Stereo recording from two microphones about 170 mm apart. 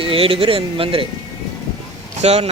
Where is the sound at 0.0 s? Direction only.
30° right (ahead or behind).